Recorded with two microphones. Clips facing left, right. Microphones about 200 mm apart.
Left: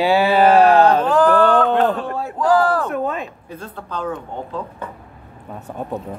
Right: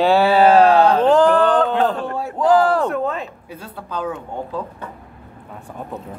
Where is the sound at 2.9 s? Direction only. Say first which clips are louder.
Even; 15° left (ahead or behind).